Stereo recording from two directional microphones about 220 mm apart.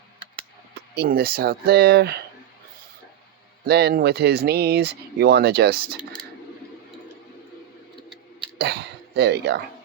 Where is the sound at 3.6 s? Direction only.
45° right (ahead or behind).